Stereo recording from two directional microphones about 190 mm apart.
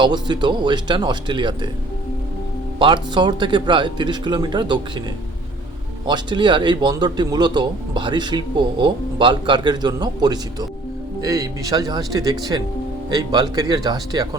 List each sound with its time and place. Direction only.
0.0 s a man's voice: 25° right (ahead or behind)
2.7 s a man's voice: 25° right (ahead or behind)
6.1 s a man's voice: 25° right (ahead or behind)